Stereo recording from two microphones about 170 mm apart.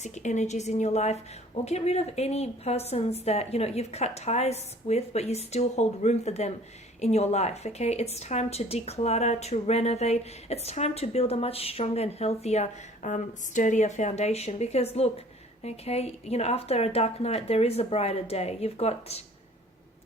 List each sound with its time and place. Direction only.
0.0 s a woman's voice: 45° left (ahead or behind)